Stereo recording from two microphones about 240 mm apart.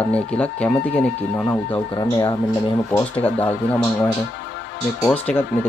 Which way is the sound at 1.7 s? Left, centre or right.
Centre.